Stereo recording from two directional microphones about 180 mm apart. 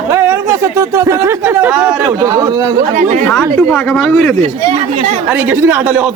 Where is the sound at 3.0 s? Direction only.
40° right (ahead or behind).